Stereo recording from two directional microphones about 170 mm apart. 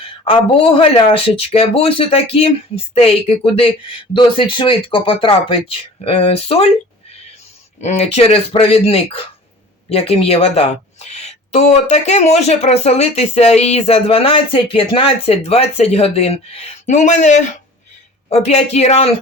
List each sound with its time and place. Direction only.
0.3 s speech: 30° left (ahead or behind)
7.8 s speech: 40° left (ahead or behind)